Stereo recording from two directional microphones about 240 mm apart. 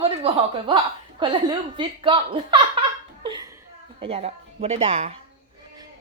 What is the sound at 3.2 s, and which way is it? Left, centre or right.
Chuckle, centre.